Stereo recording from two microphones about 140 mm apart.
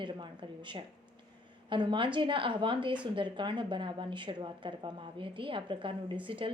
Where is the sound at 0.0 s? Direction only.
35° right (ahead or behind).